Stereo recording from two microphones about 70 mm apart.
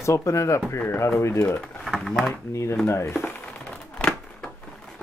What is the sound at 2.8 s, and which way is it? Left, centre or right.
Speech, left.